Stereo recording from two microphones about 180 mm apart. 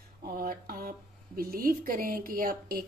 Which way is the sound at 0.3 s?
55° right (ahead or behind).